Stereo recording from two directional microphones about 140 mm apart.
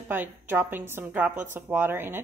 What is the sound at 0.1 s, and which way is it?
A woman's voice, 15° right (ahead or behind).